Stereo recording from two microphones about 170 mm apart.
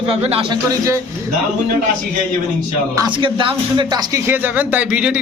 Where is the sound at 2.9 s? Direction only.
30° right (ahead or behind).